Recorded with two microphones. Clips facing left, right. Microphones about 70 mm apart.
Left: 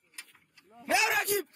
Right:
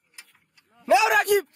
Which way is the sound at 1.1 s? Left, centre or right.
Right.